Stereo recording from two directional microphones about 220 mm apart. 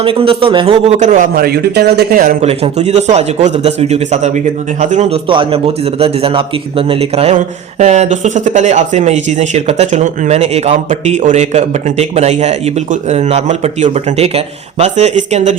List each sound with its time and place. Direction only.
0.0 s a man's voice: 25° right (ahead or behind)